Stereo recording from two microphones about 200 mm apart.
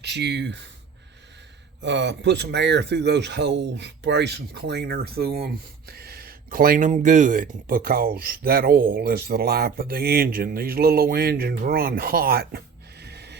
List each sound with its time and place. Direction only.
0.0 s speech: 55° right (ahead or behind)
1.8 s speech: 60° right (ahead or behind)